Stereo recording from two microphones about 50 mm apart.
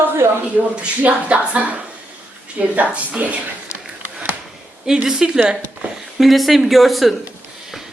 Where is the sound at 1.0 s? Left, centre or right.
Right.